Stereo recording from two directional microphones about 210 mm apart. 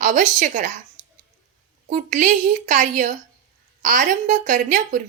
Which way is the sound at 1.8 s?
40° right (ahead or behind).